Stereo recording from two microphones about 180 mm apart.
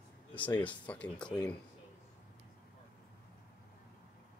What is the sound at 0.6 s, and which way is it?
Speech, 10° left (ahead or behind).